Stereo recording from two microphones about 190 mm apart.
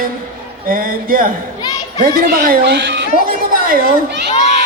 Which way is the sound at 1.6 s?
20° left (ahead or behind).